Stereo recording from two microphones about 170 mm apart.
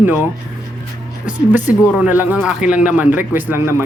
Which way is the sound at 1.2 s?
10° right (ahead or behind).